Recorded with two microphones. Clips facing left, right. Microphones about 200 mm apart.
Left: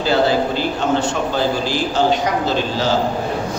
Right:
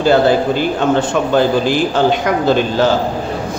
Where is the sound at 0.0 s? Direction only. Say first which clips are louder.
Right 5 dB; 55° right (ahead or behind).